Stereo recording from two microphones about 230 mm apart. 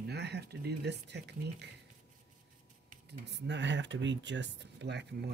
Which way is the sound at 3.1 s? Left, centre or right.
Right.